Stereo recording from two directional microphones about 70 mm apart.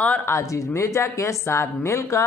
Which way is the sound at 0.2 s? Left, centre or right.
Left.